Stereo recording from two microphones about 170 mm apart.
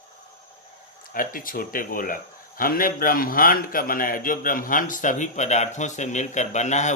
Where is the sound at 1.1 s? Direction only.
55° left (ahead or behind).